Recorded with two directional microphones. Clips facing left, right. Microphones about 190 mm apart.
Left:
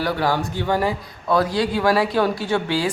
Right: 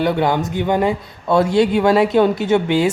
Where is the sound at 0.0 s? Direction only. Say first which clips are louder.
Right 4 dB; 20° right (ahead or behind).